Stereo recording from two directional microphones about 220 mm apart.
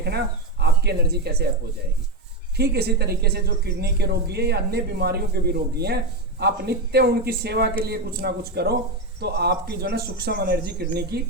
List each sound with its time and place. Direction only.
0.0 s speech: 50° right (ahead or behind)
2.6 s speech: 45° right (ahead or behind)